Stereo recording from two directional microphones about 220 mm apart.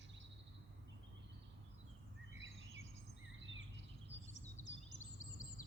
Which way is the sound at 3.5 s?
55° right (ahead or behind).